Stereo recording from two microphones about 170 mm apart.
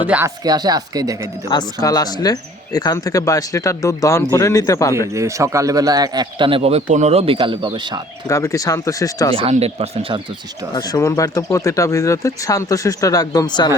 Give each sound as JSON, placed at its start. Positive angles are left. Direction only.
{"t": 0.1, "sound": "speech", "side_deg": -5}
{"t": 0.4, "sound": "a man's voice", "side_deg": -25}
{"t": 1.5, "sound": "speech", "side_deg": 25}
{"t": 5.1, "sound": "a man's voice", "side_deg": -15}
{"t": 8.3, "sound": "speech", "side_deg": 20}
{"t": 9.3, "sound": "speech", "side_deg": -35}
{"t": 10.8, "sound": "speech", "side_deg": 20}